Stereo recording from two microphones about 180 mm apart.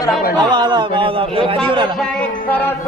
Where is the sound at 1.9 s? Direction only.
5° left (ahead or behind).